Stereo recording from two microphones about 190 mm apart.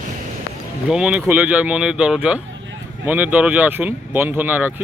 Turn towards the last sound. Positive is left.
turn(degrees=-10)  # may be behind; listen again after turning